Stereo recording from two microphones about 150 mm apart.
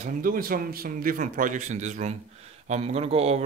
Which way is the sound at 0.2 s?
75° right (ahead or behind).